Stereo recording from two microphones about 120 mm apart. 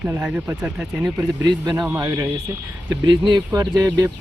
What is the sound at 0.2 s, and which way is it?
Speech, 20° right (ahead or behind).